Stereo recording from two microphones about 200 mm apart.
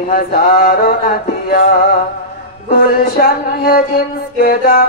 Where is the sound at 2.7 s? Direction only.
50° left (ahead or behind).